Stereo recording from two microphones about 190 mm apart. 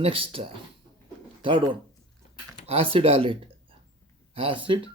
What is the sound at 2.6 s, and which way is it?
Speech, 30° right (ahead or behind).